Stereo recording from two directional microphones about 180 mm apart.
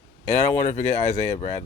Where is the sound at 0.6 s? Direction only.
40° left (ahead or behind).